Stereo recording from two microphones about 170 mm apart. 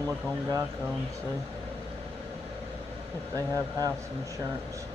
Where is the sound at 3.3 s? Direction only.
20° right (ahead or behind).